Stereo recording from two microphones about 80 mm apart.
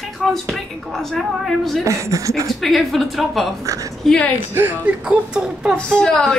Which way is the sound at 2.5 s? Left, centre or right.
Centre.